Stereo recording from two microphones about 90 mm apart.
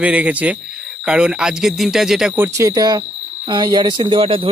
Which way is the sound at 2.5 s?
40° right (ahead or behind).